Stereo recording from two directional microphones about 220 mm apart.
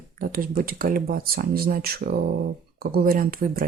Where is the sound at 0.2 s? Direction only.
40° right (ahead or behind).